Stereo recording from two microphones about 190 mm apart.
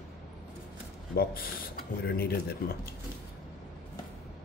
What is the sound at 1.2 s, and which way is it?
Speech, 50° left (ahead or behind).